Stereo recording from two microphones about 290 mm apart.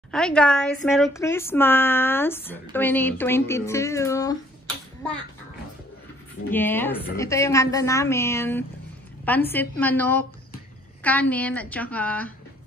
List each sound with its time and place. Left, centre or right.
0.1 s a woman's voice: centre
6.5 s a woman's voice: centre